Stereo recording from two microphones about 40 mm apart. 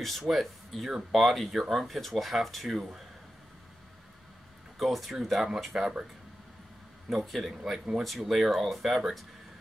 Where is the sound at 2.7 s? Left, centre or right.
Centre.